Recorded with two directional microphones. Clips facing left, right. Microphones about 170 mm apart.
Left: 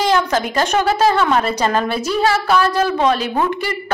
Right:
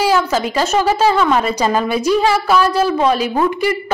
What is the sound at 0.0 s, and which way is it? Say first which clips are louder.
A woman's voice: right 1 dB; 5° right (ahead or behind).